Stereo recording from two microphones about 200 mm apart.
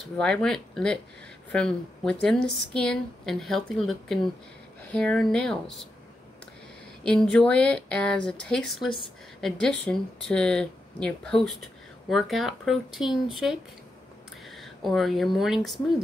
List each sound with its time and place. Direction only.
0.0 s speech: 5° left (ahead or behind)
7.0 s speech: 5° left (ahead or behind)